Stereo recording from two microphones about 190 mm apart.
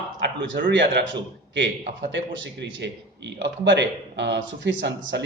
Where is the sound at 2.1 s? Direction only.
70° right (ahead or behind).